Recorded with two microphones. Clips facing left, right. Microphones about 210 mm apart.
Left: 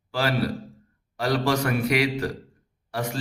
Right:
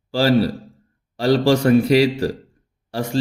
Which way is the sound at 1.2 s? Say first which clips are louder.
Right 7 dB; 30° right (ahead or behind).